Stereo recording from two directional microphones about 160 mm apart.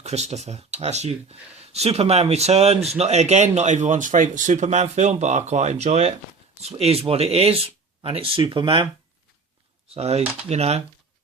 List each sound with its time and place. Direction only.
0.0 s speech: 45° right (ahead or behind)
9.9 s speech: 40° right (ahead or behind)